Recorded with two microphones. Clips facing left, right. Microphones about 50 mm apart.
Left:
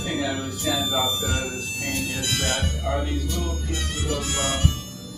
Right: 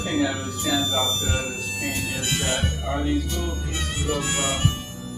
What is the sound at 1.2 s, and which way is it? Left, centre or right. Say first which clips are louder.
Speech: even; centre.